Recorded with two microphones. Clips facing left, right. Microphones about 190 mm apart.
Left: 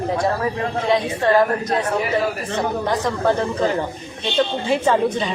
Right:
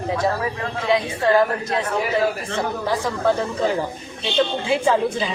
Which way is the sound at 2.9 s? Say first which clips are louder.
Even; 5° right (ahead or behind).